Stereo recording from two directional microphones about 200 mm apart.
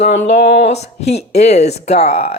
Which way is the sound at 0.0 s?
35° left (ahead or behind).